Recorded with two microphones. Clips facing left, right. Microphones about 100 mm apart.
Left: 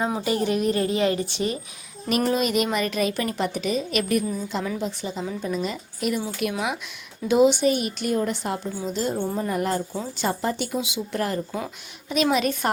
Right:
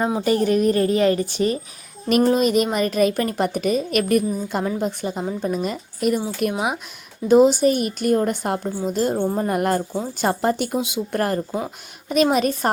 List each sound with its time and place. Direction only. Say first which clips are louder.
0.3 s a woman's voice: right 6 dB; 45° right (ahead or behind)